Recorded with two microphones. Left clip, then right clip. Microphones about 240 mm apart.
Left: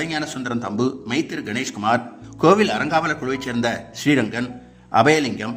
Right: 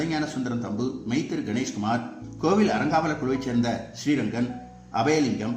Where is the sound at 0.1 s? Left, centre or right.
Left.